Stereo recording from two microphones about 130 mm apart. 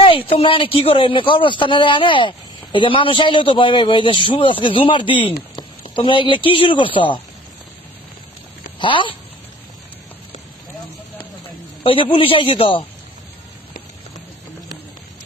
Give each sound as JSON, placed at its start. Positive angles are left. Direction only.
{"t": 0.0, "sound": "a man's voice", "side_deg": 45}
{"t": 8.8, "sound": "a man's voice", "side_deg": 40}
{"t": 11.8, "sound": "a man's voice", "side_deg": 40}